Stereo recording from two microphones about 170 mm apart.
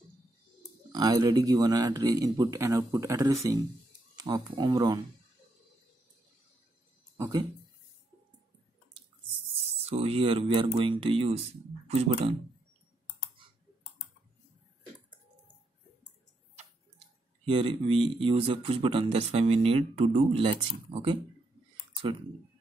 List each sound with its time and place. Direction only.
0.9 s speech: 25° right (ahead or behind)
7.2 s speech: 20° right (ahead or behind)
9.8 s speech: 35° right (ahead or behind)
17.5 s speech: 30° right (ahead or behind)